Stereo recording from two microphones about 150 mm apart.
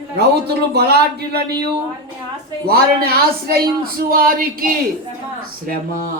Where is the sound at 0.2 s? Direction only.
90° right.